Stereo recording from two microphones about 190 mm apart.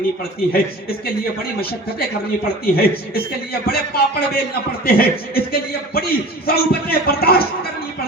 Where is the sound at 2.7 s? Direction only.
55° left (ahead or behind).